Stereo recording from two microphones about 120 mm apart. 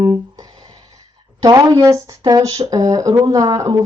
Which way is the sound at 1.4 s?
25° right (ahead or behind).